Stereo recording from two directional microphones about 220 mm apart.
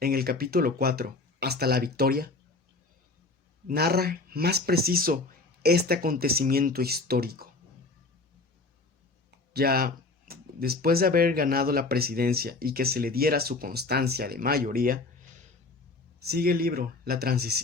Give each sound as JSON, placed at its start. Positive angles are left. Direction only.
{"t": 0.0, "sound": "speech", "side_deg": -45}
{"t": 3.7, "sound": "speech", "side_deg": -45}
{"t": 9.5, "sound": "speech", "side_deg": -45}
{"t": 16.2, "sound": "speech", "side_deg": -45}